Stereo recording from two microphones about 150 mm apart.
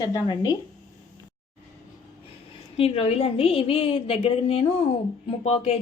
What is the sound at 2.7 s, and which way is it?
A woman's voice, 40° left (ahead or behind).